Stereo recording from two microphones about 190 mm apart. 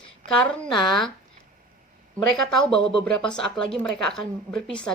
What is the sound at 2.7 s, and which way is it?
A woman's voice, 5° left (ahead or behind).